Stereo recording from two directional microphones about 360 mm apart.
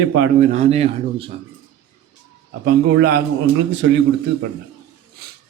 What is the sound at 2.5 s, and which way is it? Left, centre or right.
Speech, right.